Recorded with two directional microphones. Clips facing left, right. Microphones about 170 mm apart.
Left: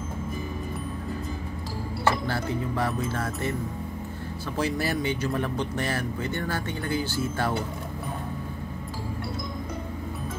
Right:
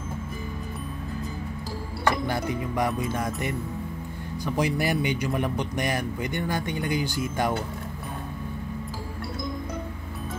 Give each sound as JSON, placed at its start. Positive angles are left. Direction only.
{"t": 2.0, "sound": "speech", "side_deg": -15}